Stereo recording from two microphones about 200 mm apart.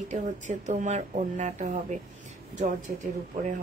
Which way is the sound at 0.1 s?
35° right (ahead or behind).